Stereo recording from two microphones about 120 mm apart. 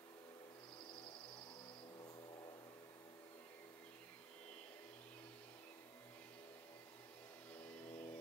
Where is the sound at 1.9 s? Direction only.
40° left (ahead or behind).